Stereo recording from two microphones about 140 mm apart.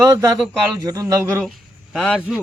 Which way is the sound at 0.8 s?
25° right (ahead or behind).